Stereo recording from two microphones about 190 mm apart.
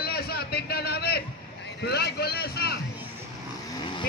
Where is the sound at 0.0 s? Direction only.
55° left (ahead or behind).